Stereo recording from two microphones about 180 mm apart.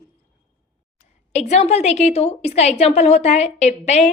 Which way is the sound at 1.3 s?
35° left (ahead or behind).